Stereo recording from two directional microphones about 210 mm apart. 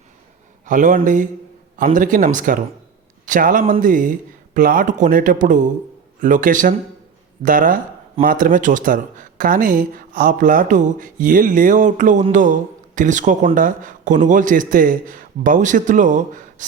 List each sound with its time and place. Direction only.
0.6 s speech: 40° right (ahead or behind)